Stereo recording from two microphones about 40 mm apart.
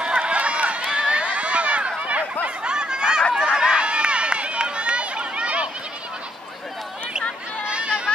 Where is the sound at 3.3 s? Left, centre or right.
Centre.